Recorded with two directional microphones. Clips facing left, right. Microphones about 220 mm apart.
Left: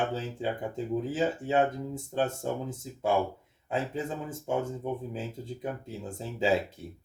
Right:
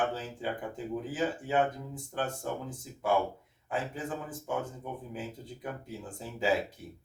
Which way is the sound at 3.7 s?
25° left (ahead or behind).